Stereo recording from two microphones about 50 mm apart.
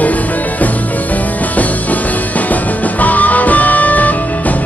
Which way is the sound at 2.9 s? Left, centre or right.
Left.